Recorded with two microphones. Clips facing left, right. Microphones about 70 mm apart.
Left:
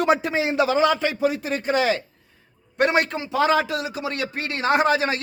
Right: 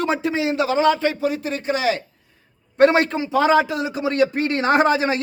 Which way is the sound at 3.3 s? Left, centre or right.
Right.